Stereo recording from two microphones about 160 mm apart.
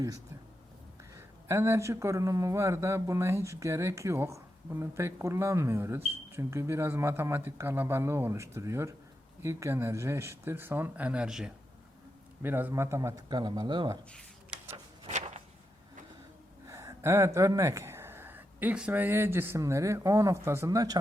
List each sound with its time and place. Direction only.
1.1 s speech: 15° right (ahead or behind)
16.6 s speech: 15° right (ahead or behind)